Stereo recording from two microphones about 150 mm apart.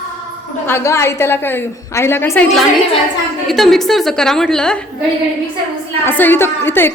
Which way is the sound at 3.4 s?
Centre (ahead or behind).